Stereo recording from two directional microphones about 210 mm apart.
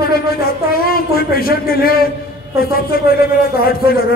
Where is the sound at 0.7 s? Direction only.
45° left (ahead or behind).